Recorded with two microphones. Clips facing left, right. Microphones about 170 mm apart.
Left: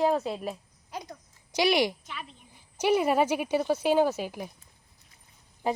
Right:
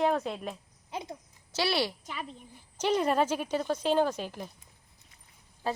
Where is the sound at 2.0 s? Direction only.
40° right (ahead or behind).